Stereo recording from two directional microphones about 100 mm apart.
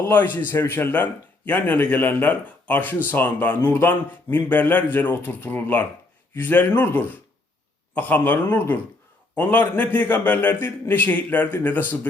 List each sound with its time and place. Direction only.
0.1 s a man's voice: 20° left (ahead or behind)